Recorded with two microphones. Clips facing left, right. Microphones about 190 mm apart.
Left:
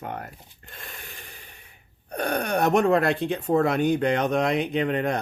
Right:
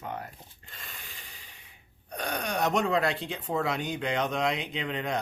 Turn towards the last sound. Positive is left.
turn(degrees=55)  # may be behind; listen again after turning